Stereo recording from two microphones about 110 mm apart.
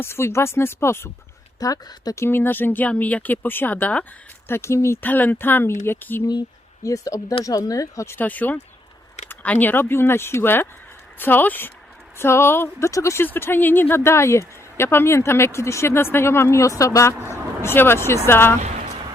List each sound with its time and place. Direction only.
0.0 s a woman's voice: 25° left (ahead or behind)
1.5 s a woman's voice: 35° left (ahead or behind); by 6.2 s 20° left (ahead or behind)
6.8 s a woman's voice: 30° left (ahead or behind)
18.6 s a sound: 90° right